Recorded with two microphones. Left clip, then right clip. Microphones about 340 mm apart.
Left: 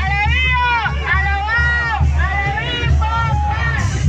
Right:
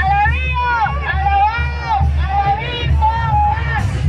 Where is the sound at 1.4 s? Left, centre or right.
Right.